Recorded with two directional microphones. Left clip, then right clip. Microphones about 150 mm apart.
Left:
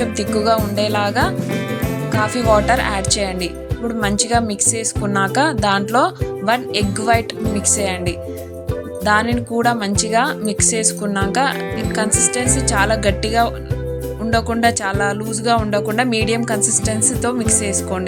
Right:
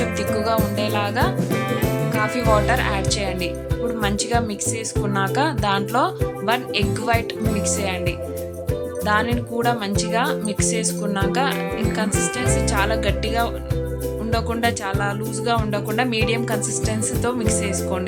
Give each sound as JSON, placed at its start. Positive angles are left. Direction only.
{"t": 0.0, "sound": "speech", "side_deg": 30}